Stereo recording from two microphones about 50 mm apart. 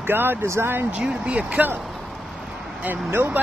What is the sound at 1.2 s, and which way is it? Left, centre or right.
Speech, right.